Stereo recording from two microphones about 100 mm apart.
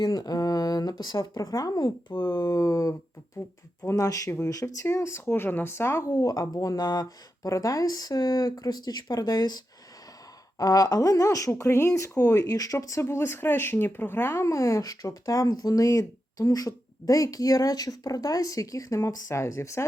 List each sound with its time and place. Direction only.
0.0 s speech: 40° left (ahead or behind); by 3.5 s 25° left (ahead or behind)
3.8 s speech: 35° left (ahead or behind)